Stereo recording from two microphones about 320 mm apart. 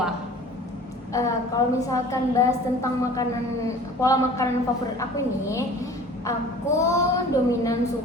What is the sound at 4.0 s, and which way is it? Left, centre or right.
Female singing, centre.